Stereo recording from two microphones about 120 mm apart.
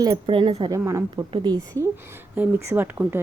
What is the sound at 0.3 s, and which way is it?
Speech, 45° right (ahead or behind).